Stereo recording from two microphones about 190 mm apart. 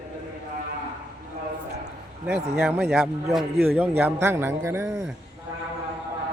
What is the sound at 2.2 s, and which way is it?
Speech, 5° right (ahead or behind).